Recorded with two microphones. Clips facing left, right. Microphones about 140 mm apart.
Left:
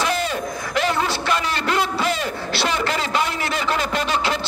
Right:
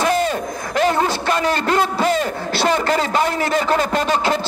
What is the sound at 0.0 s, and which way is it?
A man's voice, 45° right (ahead or behind).